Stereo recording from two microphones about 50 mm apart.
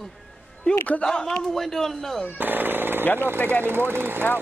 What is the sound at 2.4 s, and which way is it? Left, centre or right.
Jackhammer, right.